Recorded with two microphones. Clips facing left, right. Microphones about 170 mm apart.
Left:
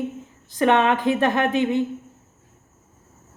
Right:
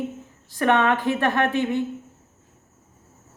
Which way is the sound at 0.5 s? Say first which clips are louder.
Left 2 dB; 20° left (ahead or behind).